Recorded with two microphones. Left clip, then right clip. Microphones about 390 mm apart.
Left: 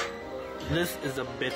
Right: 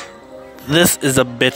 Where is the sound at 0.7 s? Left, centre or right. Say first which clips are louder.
Right 16 dB; right.